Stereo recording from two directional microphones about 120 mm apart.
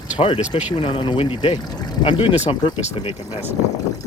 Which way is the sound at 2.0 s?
50° left (ahead or behind).